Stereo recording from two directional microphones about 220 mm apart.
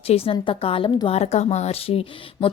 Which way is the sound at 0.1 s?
25° left (ahead or behind).